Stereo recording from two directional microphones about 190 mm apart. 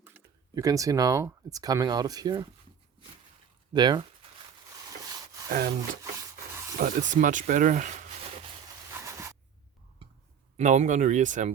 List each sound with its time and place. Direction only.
0.0 s speech: 15° right (ahead or behind)
3.7 s speech: 20° right (ahead or behind)
5.5 s speech: 50° right (ahead or behind)
10.6 s speech: 40° right (ahead or behind)